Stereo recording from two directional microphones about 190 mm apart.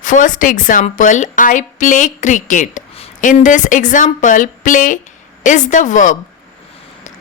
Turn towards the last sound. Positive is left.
turn(degrees=40)  # may be behind; listen again after turning